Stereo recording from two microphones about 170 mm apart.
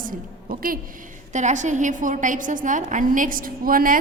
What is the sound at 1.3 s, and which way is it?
A woman's voice, 45° right (ahead or behind).